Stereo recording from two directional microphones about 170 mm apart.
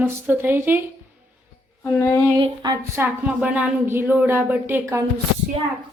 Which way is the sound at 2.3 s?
25° right (ahead or behind).